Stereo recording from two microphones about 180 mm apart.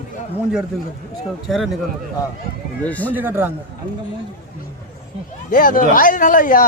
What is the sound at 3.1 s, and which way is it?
Speech, 10° right (ahead or behind).